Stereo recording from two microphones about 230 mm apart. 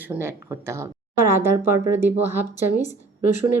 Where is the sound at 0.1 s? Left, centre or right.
Centre.